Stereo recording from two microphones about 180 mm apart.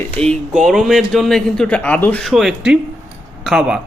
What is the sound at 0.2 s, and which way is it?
Speech, 5° left (ahead or behind).